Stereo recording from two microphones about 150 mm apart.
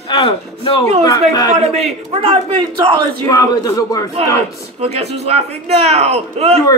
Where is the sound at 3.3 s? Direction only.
25° left (ahead or behind).